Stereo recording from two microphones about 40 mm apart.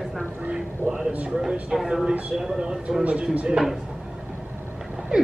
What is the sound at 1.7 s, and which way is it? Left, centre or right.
Speech, centre.